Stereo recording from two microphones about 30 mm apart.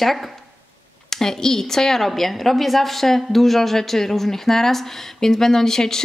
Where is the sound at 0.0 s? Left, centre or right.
Centre.